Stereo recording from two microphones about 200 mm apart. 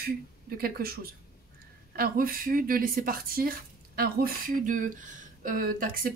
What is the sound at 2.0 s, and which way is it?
Speech, 45° right (ahead or behind).